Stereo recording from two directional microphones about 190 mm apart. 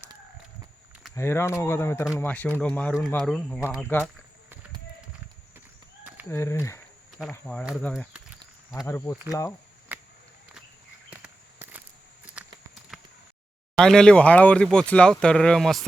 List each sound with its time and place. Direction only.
1.1 s speech: 15° left (ahead or behind)
6.2 s speech: 15° left (ahead or behind)
7.1 s speech: centre (ahead or behind); by 9.6 s 15° left (ahead or behind)
9.9 s a sound: 5° right (ahead or behind)
11.1 s walk: 5° right (ahead or behind)
12.2 s a sound: 5° right (ahead or behind)
13.7 s speech: 5° left (ahead or behind)